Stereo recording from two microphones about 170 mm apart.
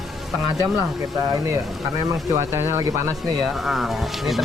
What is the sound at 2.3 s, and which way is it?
Speech, 15° right (ahead or behind).